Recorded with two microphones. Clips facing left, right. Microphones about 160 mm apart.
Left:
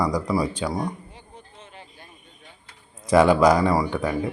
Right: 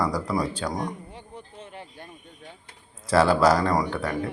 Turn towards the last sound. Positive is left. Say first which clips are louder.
# left 2 dB
turn(degrees=0)  # may be behind; listen again after turning